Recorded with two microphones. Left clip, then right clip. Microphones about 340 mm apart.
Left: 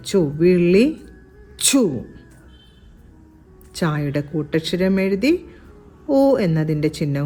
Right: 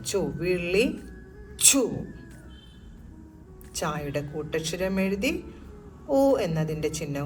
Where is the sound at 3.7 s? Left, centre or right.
Left.